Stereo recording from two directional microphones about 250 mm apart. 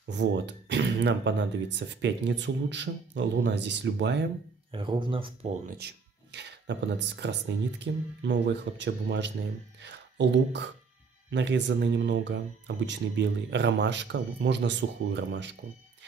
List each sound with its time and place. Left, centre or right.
0.1 s speech: right
4.7 s speech: centre
5.8 s speech: right